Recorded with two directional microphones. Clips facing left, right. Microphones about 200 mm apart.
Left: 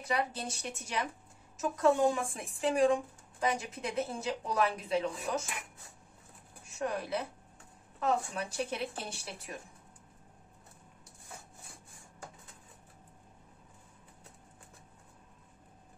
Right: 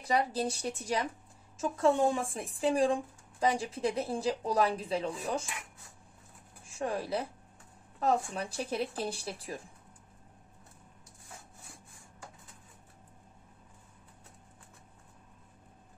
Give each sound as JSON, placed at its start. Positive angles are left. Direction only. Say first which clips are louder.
{"t": 0.1, "sound": "a woman's voice", "louder": "right 4 dB", "side_deg": -35}
{"t": 6.8, "sound": "speech", "louder": "right 1 dB", "side_deg": -30}